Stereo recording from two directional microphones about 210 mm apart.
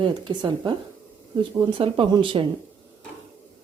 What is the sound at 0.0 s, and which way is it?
A woman's voice, 20° right (ahead or behind).